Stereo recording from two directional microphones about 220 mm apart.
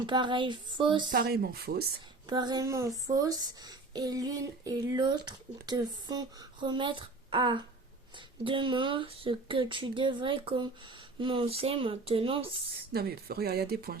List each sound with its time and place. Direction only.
0.0 s speech: 20° right (ahead or behind)
1.1 s speech: 40° right (ahead or behind)
2.2 s speech: 20° right (ahead or behind)
12.9 s speech: 45° right (ahead or behind)